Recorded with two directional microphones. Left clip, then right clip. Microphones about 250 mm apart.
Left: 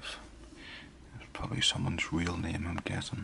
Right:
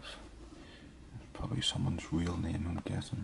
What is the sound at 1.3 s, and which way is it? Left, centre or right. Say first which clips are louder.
Speech: left 5 dB; centre.